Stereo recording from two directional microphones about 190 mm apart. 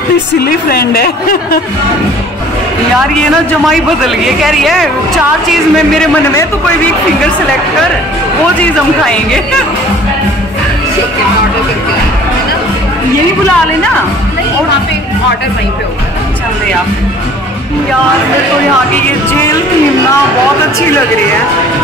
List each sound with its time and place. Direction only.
0.4 s a woman's voice: 55° left (ahead or behind)
4.4 s a woman's voice: centre (ahead or behind)